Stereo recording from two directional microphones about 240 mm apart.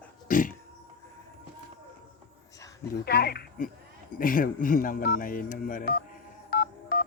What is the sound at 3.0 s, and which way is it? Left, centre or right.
Speech, left.